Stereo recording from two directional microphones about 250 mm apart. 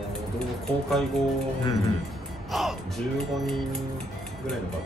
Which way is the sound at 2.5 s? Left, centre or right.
Centre.